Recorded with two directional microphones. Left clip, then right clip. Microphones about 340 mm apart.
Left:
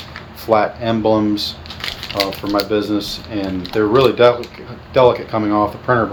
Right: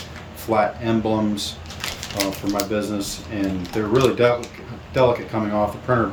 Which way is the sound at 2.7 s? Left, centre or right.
Centre.